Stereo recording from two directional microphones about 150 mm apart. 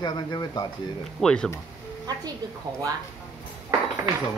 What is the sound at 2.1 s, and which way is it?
Speech, 25° right (ahead or behind).